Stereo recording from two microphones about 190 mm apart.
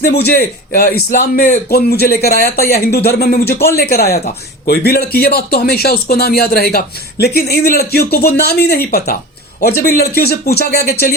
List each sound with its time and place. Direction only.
0.0 s speech: 60° left (ahead or behind)